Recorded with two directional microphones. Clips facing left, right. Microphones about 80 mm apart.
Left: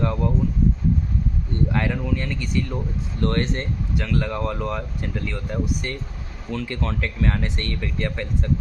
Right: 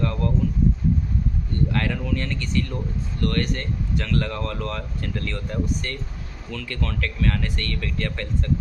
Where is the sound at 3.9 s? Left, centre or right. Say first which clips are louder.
Left 1 dB; centre.